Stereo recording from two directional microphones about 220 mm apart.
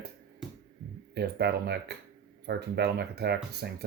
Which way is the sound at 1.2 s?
45° right (ahead or behind).